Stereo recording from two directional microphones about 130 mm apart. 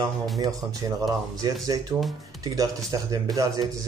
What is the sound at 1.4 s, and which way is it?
Speech, 30° right (ahead or behind).